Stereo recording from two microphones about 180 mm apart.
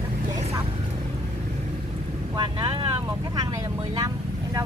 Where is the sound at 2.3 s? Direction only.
25° right (ahead or behind).